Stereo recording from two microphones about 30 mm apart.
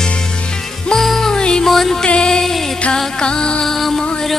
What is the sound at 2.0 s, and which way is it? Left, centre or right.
Music, left.